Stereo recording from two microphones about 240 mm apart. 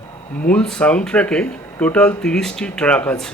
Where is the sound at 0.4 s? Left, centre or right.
Centre.